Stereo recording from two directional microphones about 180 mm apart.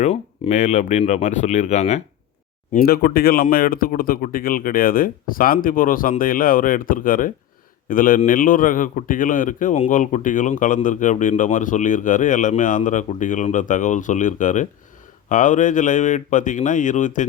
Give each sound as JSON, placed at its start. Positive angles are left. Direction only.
{"t": 0.0, "sound": "speech", "side_deg": 40}
{"t": 2.7, "sound": "a man's voice", "side_deg": 55}